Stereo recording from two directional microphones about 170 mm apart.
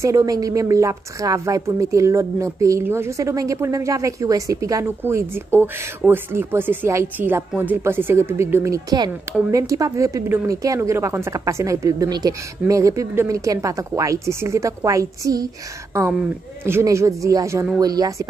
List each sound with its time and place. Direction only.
0.0 s speech: 20° right (ahead or behind)